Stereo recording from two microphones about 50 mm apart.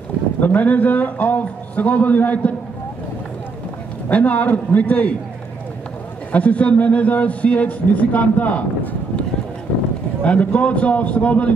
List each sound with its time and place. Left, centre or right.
0.4 s a man's voice: left
4.1 s a man's voice: left
6.3 s speech: left
10.2 s speech: left